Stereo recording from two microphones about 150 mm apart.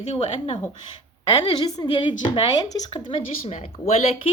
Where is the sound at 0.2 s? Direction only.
35° left (ahead or behind).